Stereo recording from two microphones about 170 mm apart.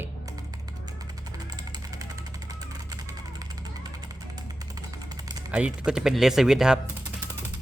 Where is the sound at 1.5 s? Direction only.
25° right (ahead or behind).